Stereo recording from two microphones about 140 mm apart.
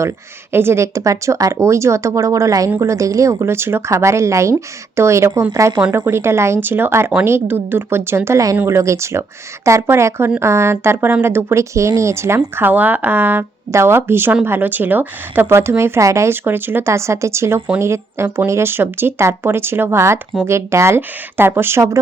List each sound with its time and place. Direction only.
0.5 s a woman's voice: 15° right (ahead or behind)